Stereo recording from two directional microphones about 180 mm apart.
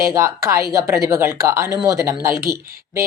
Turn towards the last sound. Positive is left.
turn(degrees=-15)  # may be behind; listen again after turning